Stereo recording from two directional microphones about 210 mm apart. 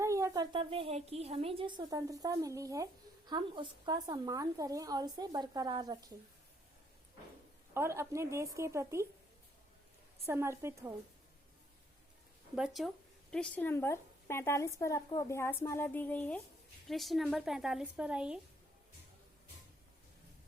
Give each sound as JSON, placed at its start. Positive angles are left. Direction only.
{"t": 0.0, "sound": "speech", "side_deg": -15}
{"t": 7.7, "sound": "a woman's voice", "side_deg": -10}
{"t": 10.2, "sound": "a woman's voice", "side_deg": -10}
{"t": 12.5, "sound": "a woman's voice", "side_deg": 0}